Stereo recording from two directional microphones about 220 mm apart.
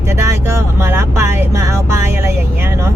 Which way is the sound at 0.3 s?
10° right (ahead or behind).